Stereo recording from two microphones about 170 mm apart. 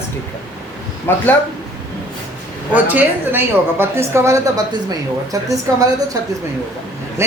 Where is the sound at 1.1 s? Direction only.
15° left (ahead or behind).